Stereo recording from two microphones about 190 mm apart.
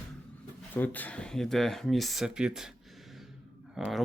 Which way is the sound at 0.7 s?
10° left (ahead or behind).